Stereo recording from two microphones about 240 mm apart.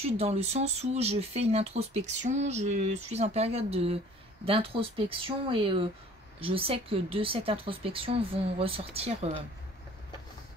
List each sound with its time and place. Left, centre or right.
0.0 s speech: right